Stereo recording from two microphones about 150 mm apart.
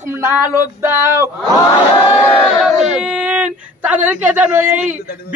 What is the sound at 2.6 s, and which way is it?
Speech, centre (ahead or behind).